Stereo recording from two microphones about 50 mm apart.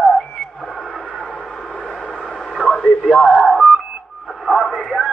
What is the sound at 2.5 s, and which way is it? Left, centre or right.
Radio, centre.